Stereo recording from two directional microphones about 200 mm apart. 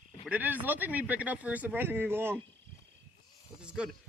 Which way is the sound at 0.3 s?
10° right (ahead or behind).